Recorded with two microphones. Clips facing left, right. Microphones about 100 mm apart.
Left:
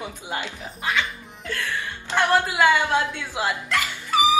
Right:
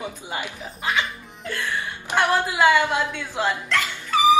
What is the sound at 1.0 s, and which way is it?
Laughter, 20° right (ahead or behind).